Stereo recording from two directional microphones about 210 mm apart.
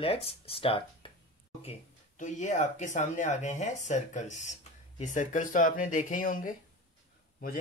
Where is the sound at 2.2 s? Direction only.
35° left (ahead or behind).